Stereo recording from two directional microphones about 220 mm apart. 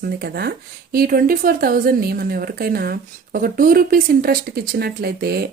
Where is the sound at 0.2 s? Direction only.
45° right (ahead or behind).